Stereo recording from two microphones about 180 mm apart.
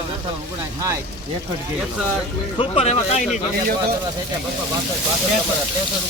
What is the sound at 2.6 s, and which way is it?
Speech, 35° left (ahead or behind).